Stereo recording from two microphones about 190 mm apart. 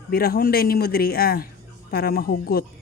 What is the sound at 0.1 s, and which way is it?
Speech, 55° left (ahead or behind).